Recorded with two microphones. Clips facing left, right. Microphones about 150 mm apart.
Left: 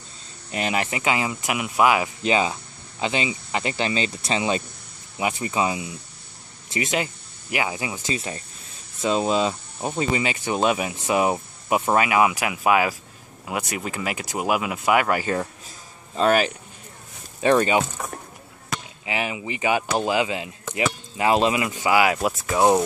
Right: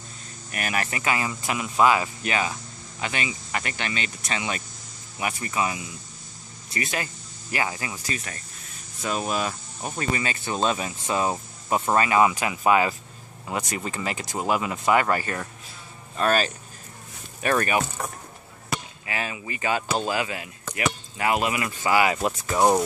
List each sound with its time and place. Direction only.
0.5 s speech: 20° left (ahead or behind)
2.2 s speech: 25° left (ahead or behind)
19.0 s speech: 20° left (ahead or behind)